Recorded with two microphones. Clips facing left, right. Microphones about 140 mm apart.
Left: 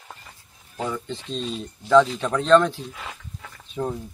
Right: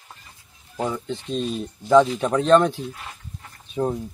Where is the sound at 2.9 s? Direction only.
90° left.